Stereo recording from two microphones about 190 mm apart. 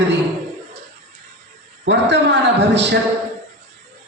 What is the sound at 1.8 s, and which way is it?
Speech, 65° right (ahead or behind).